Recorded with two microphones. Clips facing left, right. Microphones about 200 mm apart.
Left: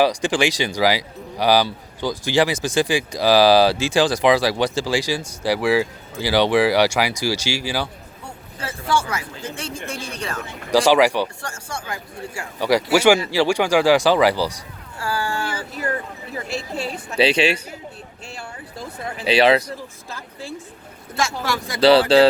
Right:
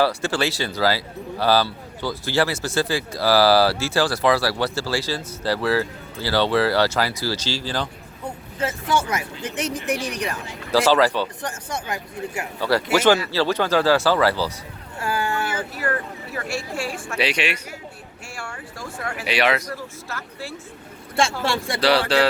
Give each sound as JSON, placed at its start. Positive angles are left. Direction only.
{"t": 0.0, "sound": "speech", "side_deg": 15}
{"t": 8.6, "sound": "speech", "side_deg": -20}
{"t": 10.7, "sound": "speech", "side_deg": 15}
{"t": 11.4, "sound": "speech", "side_deg": -20}
{"t": 12.5, "sound": "speech", "side_deg": 15}
{"t": 14.9, "sound": "a sound", "side_deg": -20}
{"t": 16.3, "sound": "a woman's voice", "side_deg": 20}
{"t": 19.7, "sound": "speech", "side_deg": 15}
{"t": 21.4, "sound": "speech", "side_deg": -30}
{"t": 21.8, "sound": "a woman's voice", "side_deg": 25}